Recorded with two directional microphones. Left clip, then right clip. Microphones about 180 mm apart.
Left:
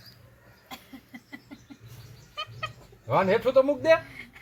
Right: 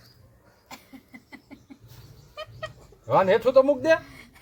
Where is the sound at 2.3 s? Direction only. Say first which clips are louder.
Left 2 dB; 90° right.